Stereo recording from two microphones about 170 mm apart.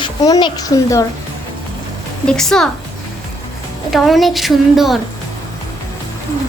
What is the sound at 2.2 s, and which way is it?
Speech, 5° left (ahead or behind).